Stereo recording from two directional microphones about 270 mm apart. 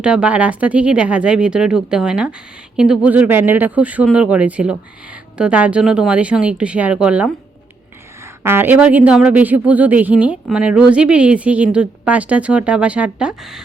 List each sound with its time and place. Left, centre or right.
0.0 s speech: centre
8.4 s speech: centre